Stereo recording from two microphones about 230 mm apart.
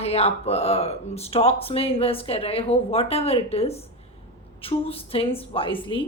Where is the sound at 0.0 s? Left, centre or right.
Left.